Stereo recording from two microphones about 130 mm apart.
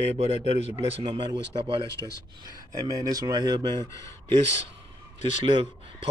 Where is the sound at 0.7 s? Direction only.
40° right (ahead or behind).